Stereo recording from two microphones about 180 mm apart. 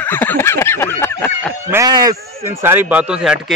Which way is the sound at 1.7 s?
20° right (ahead or behind).